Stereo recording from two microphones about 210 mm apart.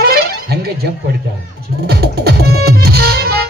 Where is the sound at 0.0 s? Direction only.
45° right (ahead or behind).